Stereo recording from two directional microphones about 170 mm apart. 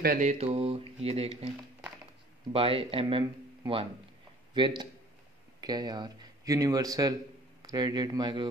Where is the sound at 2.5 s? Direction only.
35° right (ahead or behind).